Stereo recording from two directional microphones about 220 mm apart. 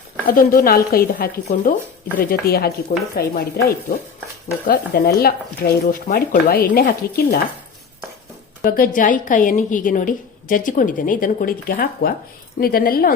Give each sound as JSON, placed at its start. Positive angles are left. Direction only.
{"t": 0.3, "sound": "a woman's voice", "side_deg": 40}
{"t": 8.6, "sound": "a woman's voice", "side_deg": 40}